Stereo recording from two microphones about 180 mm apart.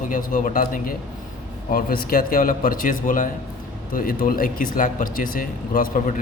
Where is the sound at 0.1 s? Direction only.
50° left (ahead or behind).